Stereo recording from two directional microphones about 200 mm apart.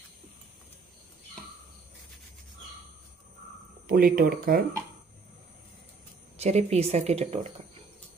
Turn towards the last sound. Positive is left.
turn(degrees=-30)  # may be behind; listen again after turning